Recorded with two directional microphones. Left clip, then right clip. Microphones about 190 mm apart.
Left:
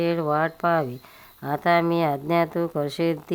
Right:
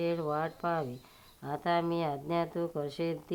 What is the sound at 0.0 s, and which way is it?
Speech, 40° left (ahead or behind).